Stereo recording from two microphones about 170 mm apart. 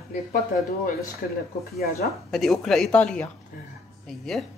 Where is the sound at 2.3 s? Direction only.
Centre (ahead or behind).